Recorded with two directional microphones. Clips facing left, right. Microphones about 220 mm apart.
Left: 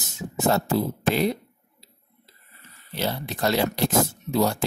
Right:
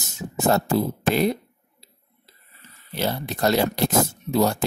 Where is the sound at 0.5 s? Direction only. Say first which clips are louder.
Right 2 dB; 50° right (ahead or behind).